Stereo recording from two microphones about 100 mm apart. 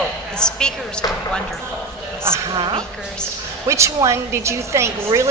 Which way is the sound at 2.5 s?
50° right (ahead or behind).